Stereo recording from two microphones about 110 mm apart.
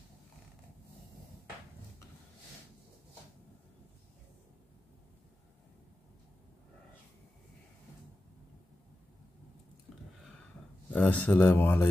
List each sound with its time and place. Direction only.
10.9 s speech: 15° left (ahead or behind)